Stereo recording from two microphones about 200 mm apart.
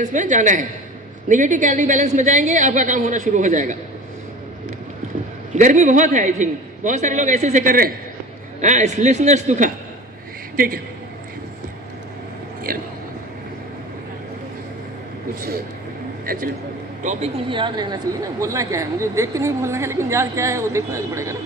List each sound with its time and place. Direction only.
0.0 s a woman's voice: 40° right (ahead or behind)
5.5 s a woman's voice: 35° right (ahead or behind)
17.0 s a woman's voice: 35° right (ahead or behind)
17.5 s a woman's voice: 25° right (ahead or behind)